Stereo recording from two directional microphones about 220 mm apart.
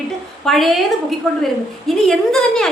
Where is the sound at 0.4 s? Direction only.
Centre (ahead or behind).